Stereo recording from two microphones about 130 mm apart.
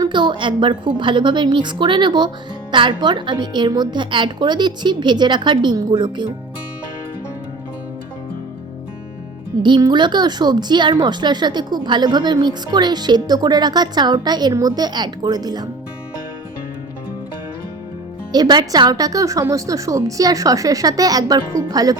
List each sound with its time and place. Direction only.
0.0 s a woman's voice: 35° right (ahead or behind)
9.6 s a woman's voice: 35° right (ahead or behind)
18.3 s speech: 30° right (ahead or behind)